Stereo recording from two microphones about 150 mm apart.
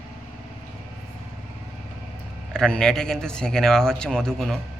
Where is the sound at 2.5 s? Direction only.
5° left (ahead or behind).